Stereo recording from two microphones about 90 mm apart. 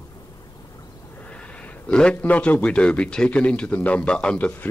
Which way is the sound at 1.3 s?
15° left (ahead or behind).